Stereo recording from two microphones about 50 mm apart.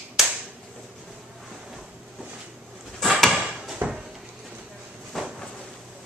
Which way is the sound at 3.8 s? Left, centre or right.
Right.